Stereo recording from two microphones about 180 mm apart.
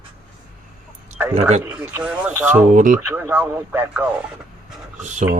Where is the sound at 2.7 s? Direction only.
45° right (ahead or behind).